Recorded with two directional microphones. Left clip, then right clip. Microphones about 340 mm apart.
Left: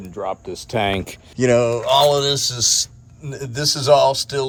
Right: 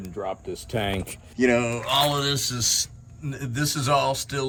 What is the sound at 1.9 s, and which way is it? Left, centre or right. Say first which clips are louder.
Speech: left 7 dB; centre.